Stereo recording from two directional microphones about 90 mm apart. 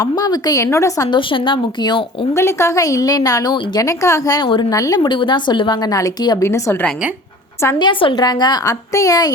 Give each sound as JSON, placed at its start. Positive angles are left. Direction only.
{"t": 0.0, "sound": "a woman's voice", "side_deg": 45}
{"t": 0.6, "sound": "a woman's voice", "side_deg": 35}
{"t": 1.1, "sound": "a woman's voice", "side_deg": 65}
{"t": 2.3, "sound": "a woman's voice", "side_deg": 30}
{"t": 4.9, "sound": "a woman's voice", "side_deg": 65}
{"t": 6.4, "sound": "a woman's voice", "side_deg": 30}
{"t": 7.8, "sound": "a woman's voice", "side_deg": 65}
{"t": 8.2, "sound": "a woman's voice", "side_deg": 50}
{"t": 8.6, "sound": "a woman's voice", "side_deg": 40}